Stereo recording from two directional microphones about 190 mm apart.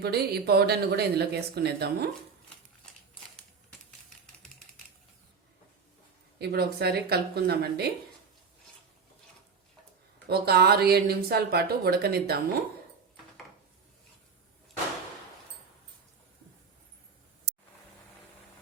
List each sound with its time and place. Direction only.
0.0 s speech: 55° right (ahead or behind)
6.4 s speech: 55° right (ahead or behind)
10.2 s speech: 55° right (ahead or behind)